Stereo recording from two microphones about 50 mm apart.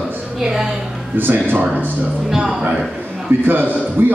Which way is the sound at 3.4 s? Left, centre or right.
Right.